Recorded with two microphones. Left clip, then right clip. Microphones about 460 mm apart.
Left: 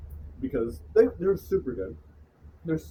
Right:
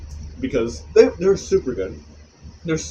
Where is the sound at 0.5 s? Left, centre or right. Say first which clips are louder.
Right 8 dB; left.